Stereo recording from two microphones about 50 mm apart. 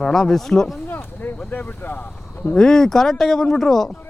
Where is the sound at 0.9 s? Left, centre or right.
Left.